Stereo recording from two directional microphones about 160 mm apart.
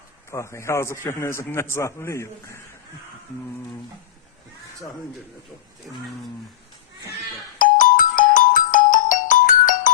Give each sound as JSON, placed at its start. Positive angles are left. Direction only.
{"t": 0.3, "sound": "a man's voice", "side_deg": 15}
{"t": 7.6, "sound": "music", "side_deg": 55}